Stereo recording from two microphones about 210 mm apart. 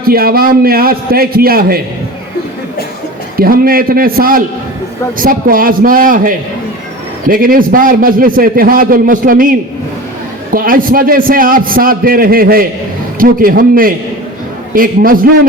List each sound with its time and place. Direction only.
0.0 s a man's voice: 45° right (ahead or behind)
3.3 s a man's voice: 45° right (ahead or behind)